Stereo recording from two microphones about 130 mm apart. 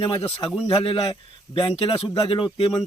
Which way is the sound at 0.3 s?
45° left (ahead or behind).